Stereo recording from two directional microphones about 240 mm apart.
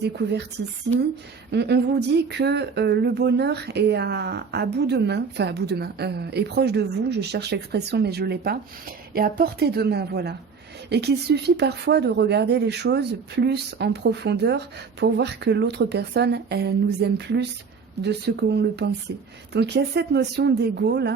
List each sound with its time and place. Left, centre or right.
0.2 s speech: right
1.5 s speech: right